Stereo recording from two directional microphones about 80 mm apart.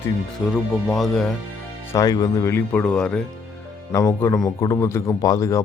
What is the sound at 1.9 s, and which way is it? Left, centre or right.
Speech, left.